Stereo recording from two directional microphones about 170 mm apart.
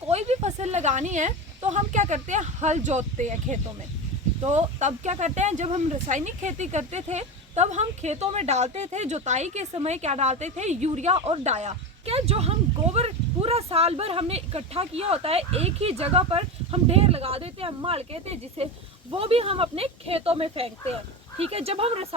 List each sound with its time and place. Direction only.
0.1 s a woman's voice: 40° right (ahead or behind)